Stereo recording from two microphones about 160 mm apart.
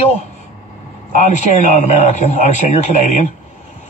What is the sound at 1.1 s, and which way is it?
Speech, 45° left (ahead or behind).